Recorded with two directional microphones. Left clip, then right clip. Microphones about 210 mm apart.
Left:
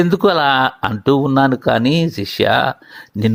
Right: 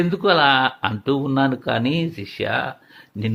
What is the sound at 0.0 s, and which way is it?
Speech, 30° left (ahead or behind).